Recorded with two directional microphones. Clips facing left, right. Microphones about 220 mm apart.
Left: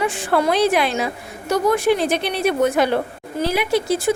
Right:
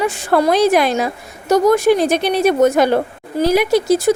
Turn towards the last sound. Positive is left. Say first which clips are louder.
# right 5 dB
turn(degrees=-40)  # may be behind; listen again after turning